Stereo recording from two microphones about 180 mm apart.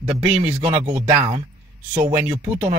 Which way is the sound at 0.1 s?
5° right (ahead or behind).